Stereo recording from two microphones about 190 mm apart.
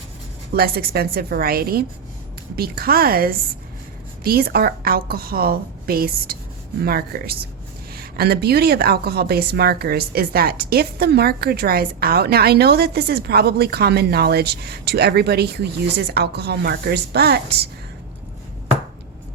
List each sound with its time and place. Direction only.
0.5 s a woman's voice: 55° right (ahead or behind)